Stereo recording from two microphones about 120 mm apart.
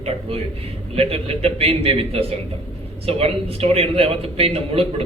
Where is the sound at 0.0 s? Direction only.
55° right (ahead or behind).